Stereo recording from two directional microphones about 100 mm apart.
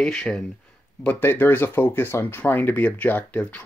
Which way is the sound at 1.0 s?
20° left (ahead or behind).